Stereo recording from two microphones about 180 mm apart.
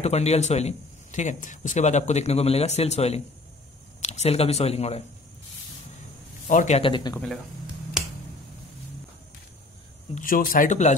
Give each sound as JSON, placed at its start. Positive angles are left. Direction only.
{"t": 0.0, "sound": "speech", "side_deg": 35}
{"t": 6.5, "sound": "speech", "side_deg": 45}
{"t": 6.8, "sound": "speech", "side_deg": 25}
{"t": 10.1, "sound": "speech", "side_deg": 50}